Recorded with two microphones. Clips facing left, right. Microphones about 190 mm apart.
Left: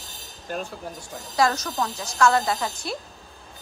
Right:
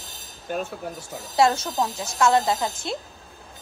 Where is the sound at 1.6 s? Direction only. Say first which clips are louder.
Right 2 dB; 25° right (ahead or behind).